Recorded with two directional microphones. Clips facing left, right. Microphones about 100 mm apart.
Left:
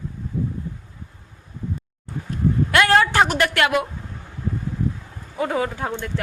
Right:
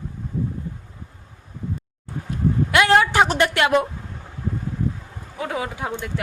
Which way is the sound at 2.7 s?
15° right (ahead or behind).